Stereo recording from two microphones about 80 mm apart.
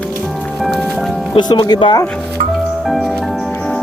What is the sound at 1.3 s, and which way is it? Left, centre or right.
Speech, left.